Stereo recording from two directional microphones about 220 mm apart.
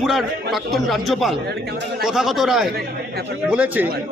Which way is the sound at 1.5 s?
45° right (ahead or behind).